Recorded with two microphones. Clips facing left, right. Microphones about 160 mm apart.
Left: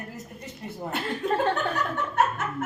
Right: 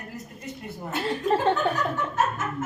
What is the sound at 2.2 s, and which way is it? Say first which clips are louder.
Chuckle: left 2 dB; 65° left (ahead or behind).